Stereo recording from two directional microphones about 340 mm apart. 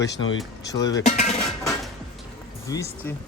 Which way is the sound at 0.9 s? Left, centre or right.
Centre.